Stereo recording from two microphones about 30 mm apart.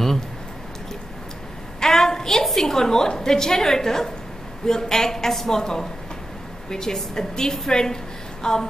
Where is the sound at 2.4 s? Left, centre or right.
Centre.